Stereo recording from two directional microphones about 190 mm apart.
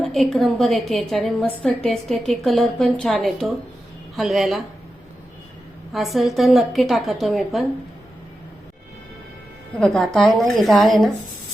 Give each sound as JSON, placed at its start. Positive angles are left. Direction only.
{"t": 0.0, "sound": "a woman's voice", "side_deg": 0}
{"t": 5.9, "sound": "a woman's voice", "side_deg": 0}
{"t": 9.8, "sound": "a woman's voice", "side_deg": 5}